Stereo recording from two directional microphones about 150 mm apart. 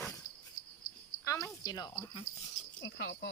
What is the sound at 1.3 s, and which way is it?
Cricket, 20° left (ahead or behind).